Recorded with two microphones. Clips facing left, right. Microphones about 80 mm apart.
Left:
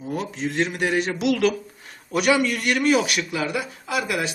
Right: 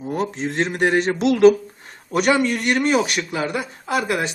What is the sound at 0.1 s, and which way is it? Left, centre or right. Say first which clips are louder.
A man's voice: right 3 dB; right.